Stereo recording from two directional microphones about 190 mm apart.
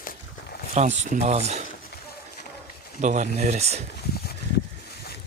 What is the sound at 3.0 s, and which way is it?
Speech, 40° right (ahead or behind).